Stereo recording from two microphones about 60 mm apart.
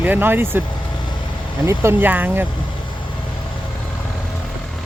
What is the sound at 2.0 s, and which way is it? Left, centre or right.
Speech, right.